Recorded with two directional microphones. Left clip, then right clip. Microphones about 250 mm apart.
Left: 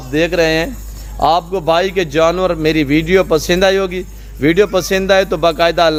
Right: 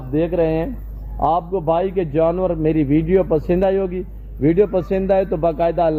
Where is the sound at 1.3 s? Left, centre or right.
Left.